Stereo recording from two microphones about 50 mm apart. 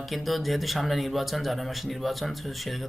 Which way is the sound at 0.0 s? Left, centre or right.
Centre.